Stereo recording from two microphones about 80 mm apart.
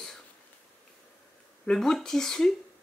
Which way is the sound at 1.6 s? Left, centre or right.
Centre.